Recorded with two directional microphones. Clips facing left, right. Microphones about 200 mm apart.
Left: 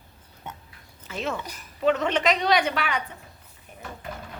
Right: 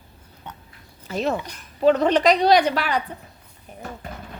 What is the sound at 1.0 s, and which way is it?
A woman's voice, 40° right (ahead or behind).